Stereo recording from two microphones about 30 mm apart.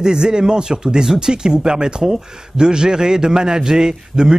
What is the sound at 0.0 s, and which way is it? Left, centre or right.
Speech, right.